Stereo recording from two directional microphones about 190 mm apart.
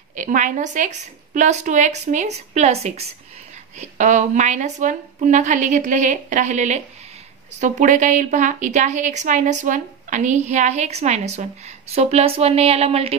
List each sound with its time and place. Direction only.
0.1 s a woman's voice: 40° right (ahead or behind)